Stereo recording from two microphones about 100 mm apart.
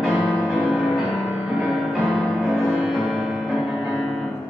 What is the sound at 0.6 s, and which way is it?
Music, 15° right (ahead or behind).